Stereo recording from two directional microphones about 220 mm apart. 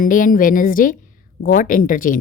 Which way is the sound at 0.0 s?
40° left (ahead or behind).